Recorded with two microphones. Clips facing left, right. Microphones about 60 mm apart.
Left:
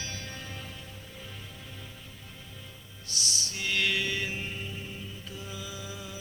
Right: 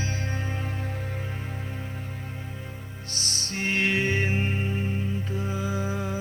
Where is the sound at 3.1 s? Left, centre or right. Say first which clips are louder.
Right 2 dB; right.